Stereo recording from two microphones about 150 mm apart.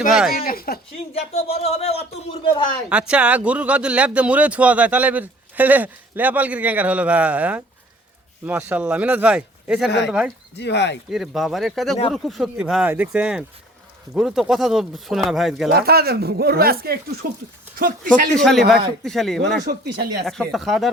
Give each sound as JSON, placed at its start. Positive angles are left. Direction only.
{"t": 0.1, "sound": "speech", "side_deg": -5}
{"t": 0.3, "sound": "speech", "side_deg": 80}
{"t": 1.1, "sound": "speech", "side_deg": 45}
{"t": 2.9, "sound": "speech", "side_deg": -5}
{"t": 15.7, "sound": "speech", "side_deg": -90}
{"t": 17.7, "sound": "speech", "side_deg": -70}
{"t": 18.3, "sound": "speech", "side_deg": 5}
{"t": 19.6, "sound": "speech", "side_deg": -90}
{"t": 20.2, "sound": "speech", "side_deg": 0}